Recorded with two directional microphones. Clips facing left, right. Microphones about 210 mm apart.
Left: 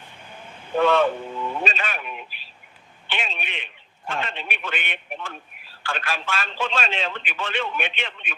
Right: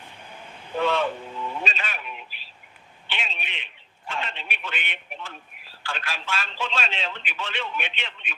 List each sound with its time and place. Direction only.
0.8 s a man's voice: 55° left (ahead or behind)